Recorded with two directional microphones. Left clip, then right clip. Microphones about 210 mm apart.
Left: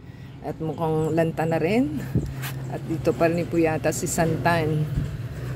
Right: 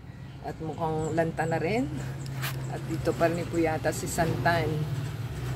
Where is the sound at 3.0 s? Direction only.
40° left (ahead or behind).